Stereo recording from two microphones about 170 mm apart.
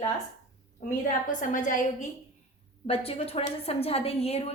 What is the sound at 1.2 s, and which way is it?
Speech, 50° left (ahead or behind).